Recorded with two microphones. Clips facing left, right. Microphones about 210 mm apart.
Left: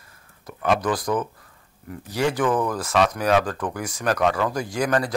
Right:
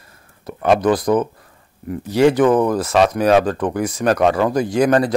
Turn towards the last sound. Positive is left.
turn(degrees=-25)  # may be behind; listen again after turning